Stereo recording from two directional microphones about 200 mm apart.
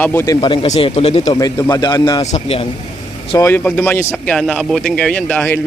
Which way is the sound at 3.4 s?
10° left (ahead or behind).